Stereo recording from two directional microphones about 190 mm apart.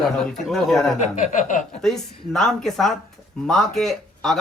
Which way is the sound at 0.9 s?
40° left (ahead or behind).